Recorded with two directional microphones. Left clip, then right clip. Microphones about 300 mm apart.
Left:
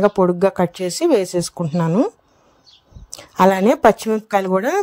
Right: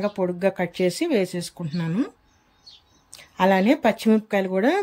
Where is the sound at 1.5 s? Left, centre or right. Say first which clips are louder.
Left 11 dB; left.